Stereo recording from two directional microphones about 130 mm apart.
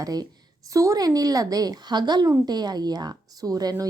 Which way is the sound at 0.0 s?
30° right (ahead or behind).